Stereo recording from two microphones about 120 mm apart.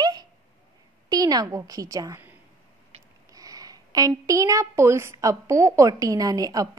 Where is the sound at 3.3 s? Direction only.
30° right (ahead or behind).